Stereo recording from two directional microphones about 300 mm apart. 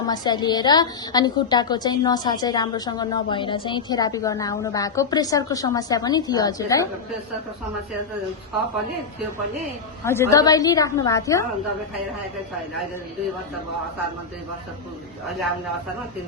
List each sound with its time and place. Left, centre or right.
0.1 s a woman's voice: centre
10.0 s a woman's voice: centre